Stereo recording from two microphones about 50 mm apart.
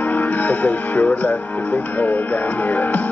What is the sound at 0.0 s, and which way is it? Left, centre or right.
Speech, left.